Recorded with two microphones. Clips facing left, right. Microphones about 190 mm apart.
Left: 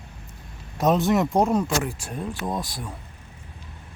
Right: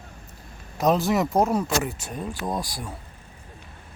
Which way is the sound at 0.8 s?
Centre (ahead or behind).